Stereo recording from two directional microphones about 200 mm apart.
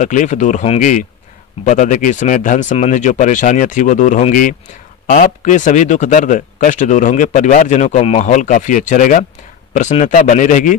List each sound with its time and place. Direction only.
0.0 s speech: 40° left (ahead or behind)